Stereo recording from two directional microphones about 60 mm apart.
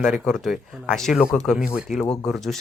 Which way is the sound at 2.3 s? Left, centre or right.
Centre.